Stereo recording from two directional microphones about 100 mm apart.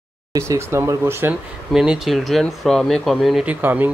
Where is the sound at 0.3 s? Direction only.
30° right (ahead or behind).